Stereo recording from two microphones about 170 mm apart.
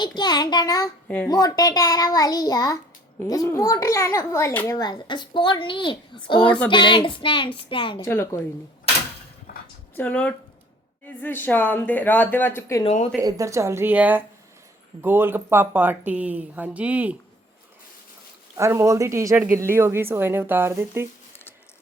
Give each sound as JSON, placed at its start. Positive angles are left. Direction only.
{"t": 0.2, "sound": "a child's voice", "side_deg": 25}
{"t": 1.0, "sound": "a child's voice", "side_deg": 10}
{"t": 1.3, "sound": "a child's voice", "side_deg": 20}
{"t": 6.4, "sound": "speech", "side_deg": 10}
{"t": 6.7, "sound": "a child's voice", "side_deg": 30}
{"t": 8.0, "sound": "speech", "side_deg": 15}
{"t": 9.9, "sound": "speech", "side_deg": 10}
{"t": 12.8, "sound": "speech", "side_deg": 40}
{"t": 13.1, "sound": "speech", "side_deg": -20}
{"t": 18.5, "sound": "speech", "side_deg": -15}